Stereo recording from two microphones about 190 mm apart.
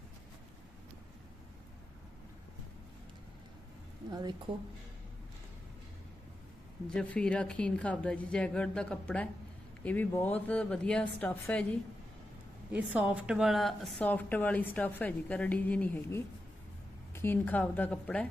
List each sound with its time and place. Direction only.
4.1 s a woman's voice: 25° right (ahead or behind)
6.9 s a woman's voice: 5° left (ahead or behind)
12.7 s a woman's voice: 10° right (ahead or behind)